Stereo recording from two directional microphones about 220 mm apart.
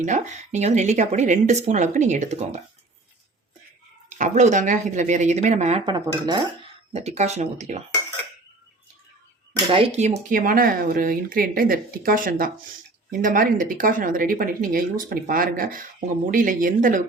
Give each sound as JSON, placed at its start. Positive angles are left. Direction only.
{"t": 0.0, "sound": "speech", "side_deg": -35}
{"t": 4.2, "sound": "speech", "side_deg": -35}
{"t": 9.6, "sound": "speech", "side_deg": -30}